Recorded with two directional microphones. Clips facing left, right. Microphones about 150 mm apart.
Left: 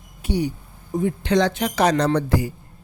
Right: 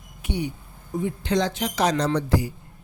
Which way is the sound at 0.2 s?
35° left (ahead or behind).